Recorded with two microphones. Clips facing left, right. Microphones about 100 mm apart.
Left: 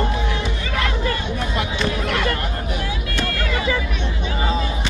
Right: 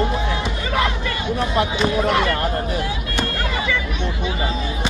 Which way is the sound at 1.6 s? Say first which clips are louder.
Right 5 dB; 35° right (ahead or behind).